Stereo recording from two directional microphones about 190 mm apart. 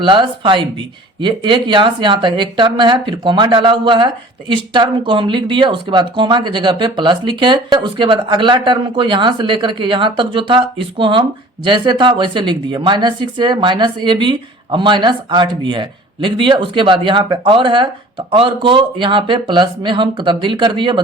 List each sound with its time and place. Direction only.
0.0 s speech: 25° right (ahead or behind)